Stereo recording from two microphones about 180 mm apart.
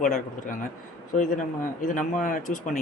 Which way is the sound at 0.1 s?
45° left (ahead or behind).